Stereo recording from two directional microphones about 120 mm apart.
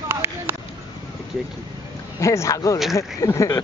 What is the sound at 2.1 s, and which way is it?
Speech, 25° left (ahead or behind).